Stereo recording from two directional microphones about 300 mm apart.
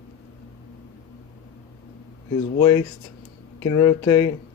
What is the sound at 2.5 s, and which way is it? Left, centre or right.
Speech, centre.